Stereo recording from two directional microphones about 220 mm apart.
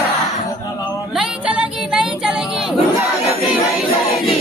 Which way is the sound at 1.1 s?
5° right (ahead or behind).